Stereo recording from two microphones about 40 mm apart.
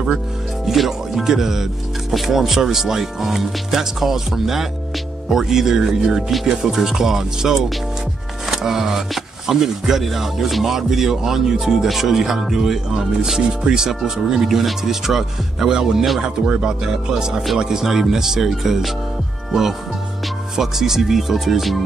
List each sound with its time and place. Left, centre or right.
0.7 s speech: centre
16.2 s speech: right
16.8 s speech: centre
20.5 s speech: centre